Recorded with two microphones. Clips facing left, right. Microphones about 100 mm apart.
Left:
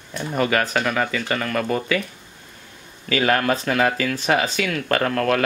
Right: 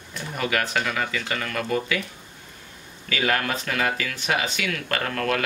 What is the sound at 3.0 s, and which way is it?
Speech, 40° left (ahead or behind).